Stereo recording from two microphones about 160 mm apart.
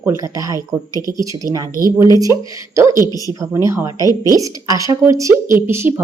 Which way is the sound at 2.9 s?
25° left (ahead or behind).